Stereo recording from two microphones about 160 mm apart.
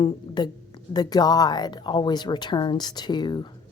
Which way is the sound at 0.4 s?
25° left (ahead or behind).